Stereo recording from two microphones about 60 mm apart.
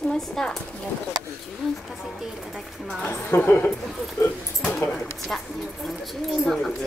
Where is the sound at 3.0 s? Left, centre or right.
Left.